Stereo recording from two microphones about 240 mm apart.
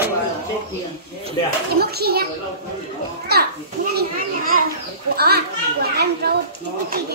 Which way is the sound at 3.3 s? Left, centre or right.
Right.